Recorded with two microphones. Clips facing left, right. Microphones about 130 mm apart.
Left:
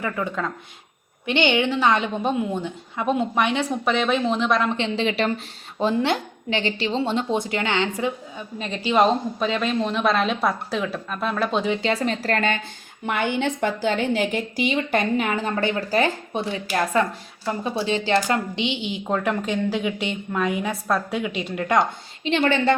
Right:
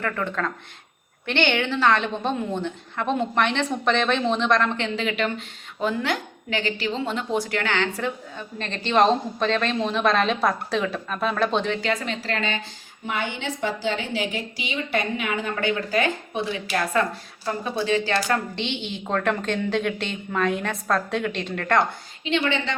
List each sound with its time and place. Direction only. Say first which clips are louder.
0.0 s a woman's voice: even; 10° left (ahead or behind)
4.8 s a woman's voice: left 2 dB; 25° left (ahead or behind); by 11.8 s 5° left (ahead or behind)
12.0 s a woman's voice: left 5 dB; 45° left (ahead or behind)
16.9 s a woman's voice: left 2 dB; 20° left (ahead or behind)
22.2 s a woman's voice: left 4 dB; 40° left (ahead or behind)